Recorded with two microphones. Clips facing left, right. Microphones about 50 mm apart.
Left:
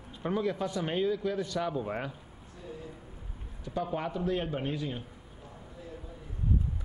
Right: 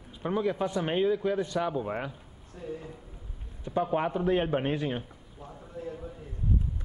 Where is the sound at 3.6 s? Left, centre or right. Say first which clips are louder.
Right 5 dB; right.